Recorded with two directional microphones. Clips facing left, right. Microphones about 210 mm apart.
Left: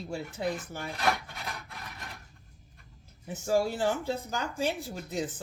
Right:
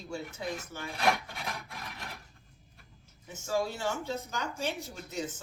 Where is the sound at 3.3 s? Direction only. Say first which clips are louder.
Left 5 dB; 35° left (ahead or behind).